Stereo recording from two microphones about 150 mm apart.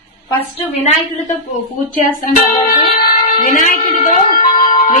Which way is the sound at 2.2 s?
65° left (ahead or behind).